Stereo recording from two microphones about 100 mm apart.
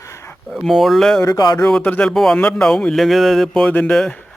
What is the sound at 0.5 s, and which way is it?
Speech, centre (ahead or behind).